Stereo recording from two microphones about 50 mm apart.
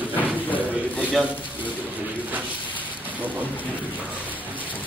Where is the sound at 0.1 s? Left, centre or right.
Left.